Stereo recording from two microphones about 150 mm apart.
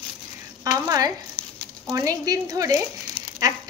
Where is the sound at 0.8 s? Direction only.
25° right (ahead or behind).